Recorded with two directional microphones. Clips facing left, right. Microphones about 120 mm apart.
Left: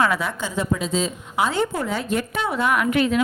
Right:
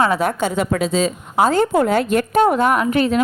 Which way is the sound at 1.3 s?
45° right (ahead or behind).